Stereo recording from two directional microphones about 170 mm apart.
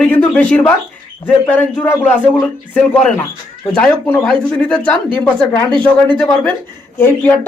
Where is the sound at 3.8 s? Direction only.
5° left (ahead or behind).